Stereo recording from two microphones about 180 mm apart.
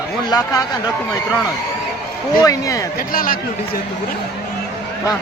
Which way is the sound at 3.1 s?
50° left (ahead or behind).